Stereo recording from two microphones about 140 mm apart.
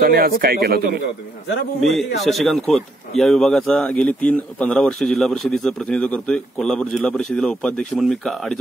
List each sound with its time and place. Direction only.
0.0 s speech: 90° right
1.8 s a man's voice: centre (ahead or behind)